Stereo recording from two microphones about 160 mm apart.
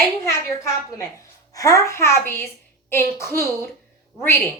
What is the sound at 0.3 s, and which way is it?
A woman's voice, 20° left (ahead or behind).